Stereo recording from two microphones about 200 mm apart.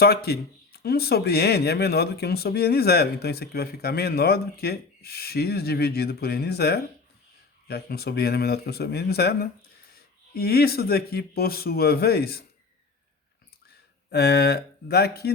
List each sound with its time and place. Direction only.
0.0 s speech: 50° left (ahead or behind)
14.1 s speech: 55° left (ahead or behind)